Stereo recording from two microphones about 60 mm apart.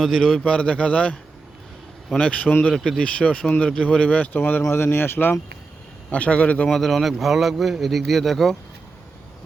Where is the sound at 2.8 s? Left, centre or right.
Centre; by 5.3 s left.